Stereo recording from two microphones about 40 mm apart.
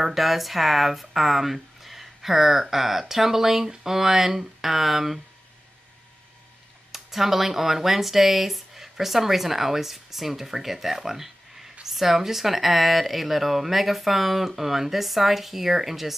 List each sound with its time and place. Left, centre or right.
0.0 s speech: centre
6.9 s speech: centre